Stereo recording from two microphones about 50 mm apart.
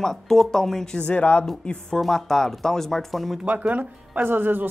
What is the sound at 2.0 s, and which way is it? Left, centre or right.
Speech, centre.